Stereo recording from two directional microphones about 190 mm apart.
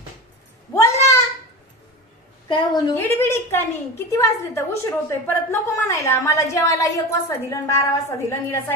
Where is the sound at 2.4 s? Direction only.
25° left (ahead or behind).